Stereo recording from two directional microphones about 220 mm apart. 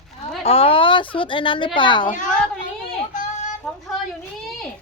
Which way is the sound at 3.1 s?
35° left (ahead or behind).